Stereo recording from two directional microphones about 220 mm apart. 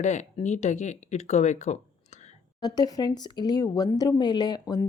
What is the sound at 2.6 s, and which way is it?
Speech, 15° left (ahead or behind).